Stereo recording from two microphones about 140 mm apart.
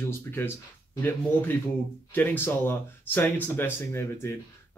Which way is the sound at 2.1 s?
15° left (ahead or behind).